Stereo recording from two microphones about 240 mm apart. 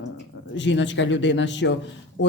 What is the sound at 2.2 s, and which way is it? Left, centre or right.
Speech, left.